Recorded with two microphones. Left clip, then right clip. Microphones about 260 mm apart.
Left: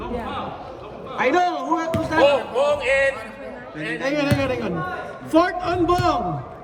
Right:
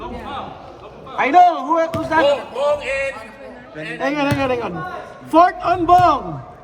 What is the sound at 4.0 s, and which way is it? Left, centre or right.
A man's voice, right.